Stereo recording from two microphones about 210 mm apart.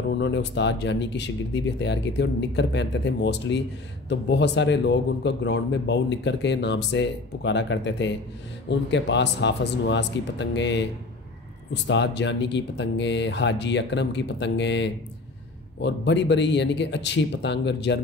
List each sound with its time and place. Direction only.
0.1 s a man's voice: 55° left (ahead or behind)